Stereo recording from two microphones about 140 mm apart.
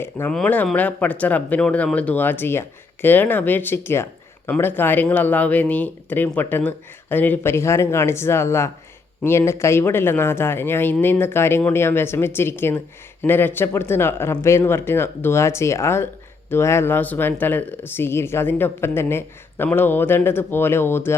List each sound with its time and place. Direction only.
0.0 s speech: 15° left (ahead or behind)